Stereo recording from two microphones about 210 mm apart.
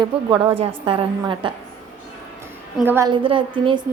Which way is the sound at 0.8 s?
25° right (ahead or behind).